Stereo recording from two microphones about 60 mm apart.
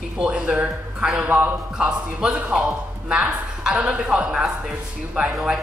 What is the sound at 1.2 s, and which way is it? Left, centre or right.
Speech, right.